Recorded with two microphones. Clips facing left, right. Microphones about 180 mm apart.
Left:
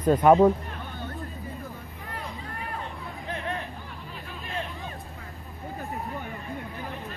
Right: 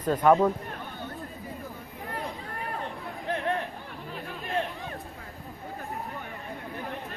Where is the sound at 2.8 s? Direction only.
55° right (ahead or behind).